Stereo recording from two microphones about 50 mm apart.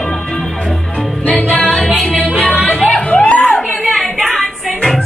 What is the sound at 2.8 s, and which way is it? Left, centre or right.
Music, centre.